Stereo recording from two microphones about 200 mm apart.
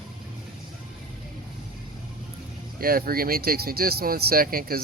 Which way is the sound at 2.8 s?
45° right (ahead or behind).